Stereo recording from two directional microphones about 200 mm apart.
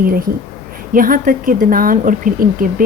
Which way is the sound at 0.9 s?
45° right (ahead or behind).